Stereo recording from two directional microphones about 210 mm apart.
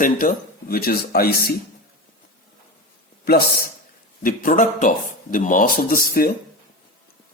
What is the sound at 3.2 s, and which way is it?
A man's voice, 45° left (ahead or behind).